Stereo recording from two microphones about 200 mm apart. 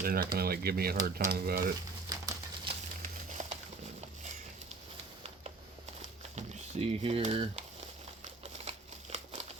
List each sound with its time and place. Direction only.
0.0 s speech: 45° right (ahead or behind)
2.0 s bird: 20° right (ahead or behind)
3.0 s a sound: 35° right (ahead or behind)
6.3 s speech: 30° right (ahead or behind)
8.2 s crumpling: 35° right (ahead or behind)